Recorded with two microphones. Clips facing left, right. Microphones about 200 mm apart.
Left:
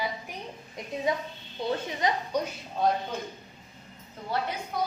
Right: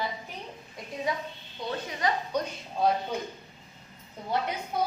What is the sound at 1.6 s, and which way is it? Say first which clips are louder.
Speech: left 2 dB; 25° left (ahead or behind).